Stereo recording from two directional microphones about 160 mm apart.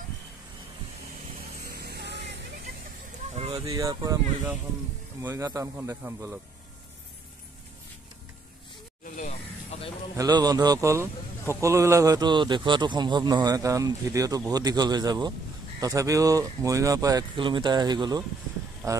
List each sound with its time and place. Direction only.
1.6 s a sound: 75° right (ahead or behind)
3.3 s a sound: 40° right (ahead or behind)
3.6 s a man's voice: 20° right (ahead or behind)
5.2 s a man's voice: 20° right (ahead or behind)
9.0 s snake: 50° left (ahead or behind)
10.1 s a man's voice: 25° right (ahead or behind)